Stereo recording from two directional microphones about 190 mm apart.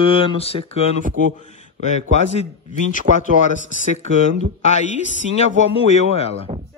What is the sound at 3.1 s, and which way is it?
Speech, 60° right (ahead or behind).